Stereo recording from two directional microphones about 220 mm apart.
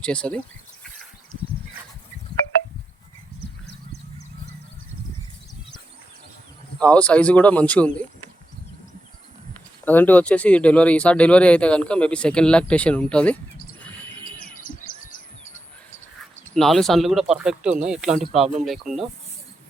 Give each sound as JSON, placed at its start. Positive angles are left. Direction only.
{"t": 0.0, "sound": "speech", "side_deg": 5}
{"t": 6.7, "sound": "speech", "side_deg": 5}
{"t": 9.8, "sound": "speech", "side_deg": 10}
{"t": 14.7, "sound": "bird", "side_deg": 40}
{"t": 16.6, "sound": "speech", "side_deg": 0}